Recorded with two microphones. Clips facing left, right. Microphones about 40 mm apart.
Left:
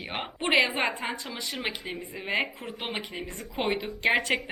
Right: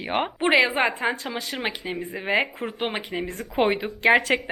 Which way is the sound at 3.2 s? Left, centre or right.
Right.